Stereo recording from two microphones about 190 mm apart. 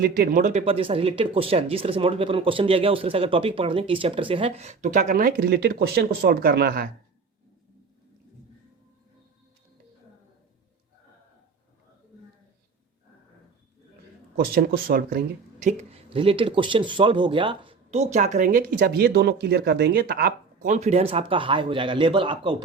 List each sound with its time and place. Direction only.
0.0 s speech: 50° right (ahead or behind)
0.6 s speech: 30° right (ahead or behind); by 6.8 s 55° right (ahead or behind)
14.8 s speech: 50° right (ahead or behind)
18.8 s speech: 60° right (ahead or behind); by 22.5 s 25° right (ahead or behind)